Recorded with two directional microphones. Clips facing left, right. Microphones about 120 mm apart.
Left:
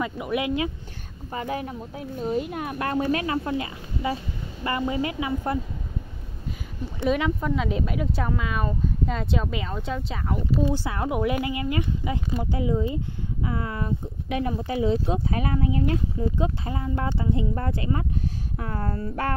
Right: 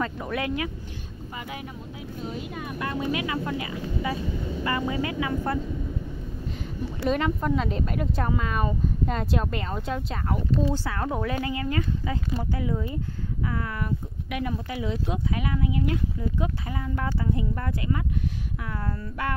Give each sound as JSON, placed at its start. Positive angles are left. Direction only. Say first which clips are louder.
{"t": 0.0, "sound": "speech", "louder": "left 2 dB", "side_deg": 15}
{"t": 1.3, "sound": "speech", "louder": "left 8 dB", "side_deg": 40}
{"t": 2.5, "sound": "speech", "louder": "left 4 dB", "side_deg": 60}
{"t": 3.1, "sound": "speech", "louder": "left 3 dB", "side_deg": 40}
{"t": 3.4, "sound": "speech", "louder": "left 1 dB", "side_deg": 30}
{"t": 7.1, "sound": "speech", "louder": "left 1 dB", "side_deg": 0}
{"t": 10.8, "sound": "speech", "louder": "left 3 dB", "side_deg": 15}